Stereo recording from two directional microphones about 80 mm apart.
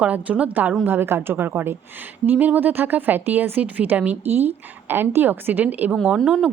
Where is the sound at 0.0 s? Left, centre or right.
Centre.